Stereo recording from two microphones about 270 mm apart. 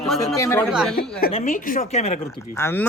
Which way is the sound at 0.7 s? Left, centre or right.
Centre.